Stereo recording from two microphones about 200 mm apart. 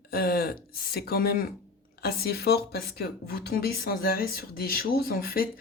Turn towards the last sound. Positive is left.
turn(degrees=45)  # may be behind; listen again after turning